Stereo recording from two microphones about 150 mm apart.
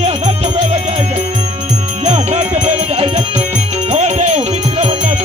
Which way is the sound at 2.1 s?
50° right (ahead or behind).